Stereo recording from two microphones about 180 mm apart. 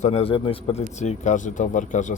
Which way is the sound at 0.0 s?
35° left (ahead or behind).